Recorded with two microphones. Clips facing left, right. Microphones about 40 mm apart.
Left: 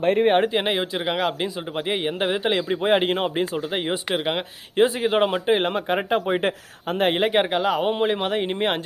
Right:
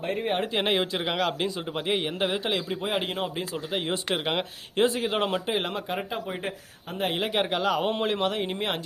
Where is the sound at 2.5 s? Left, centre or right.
Left.